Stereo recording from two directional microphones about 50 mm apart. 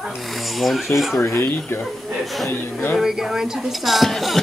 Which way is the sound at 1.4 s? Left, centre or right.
Left.